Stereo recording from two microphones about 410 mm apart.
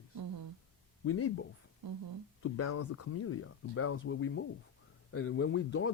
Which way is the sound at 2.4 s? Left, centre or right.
Left.